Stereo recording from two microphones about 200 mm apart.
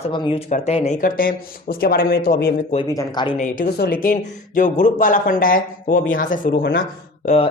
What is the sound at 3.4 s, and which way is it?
Speech, 40° left (ahead or behind).